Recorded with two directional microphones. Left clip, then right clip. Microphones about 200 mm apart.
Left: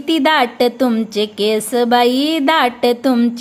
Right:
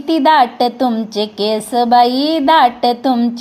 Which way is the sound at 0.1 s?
40° left (ahead or behind).